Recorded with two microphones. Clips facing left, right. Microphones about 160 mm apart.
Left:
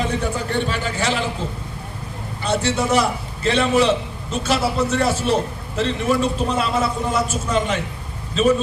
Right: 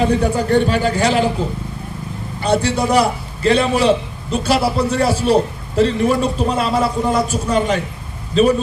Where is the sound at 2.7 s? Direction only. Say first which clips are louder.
Right 3 dB; 35° right (ahead or behind).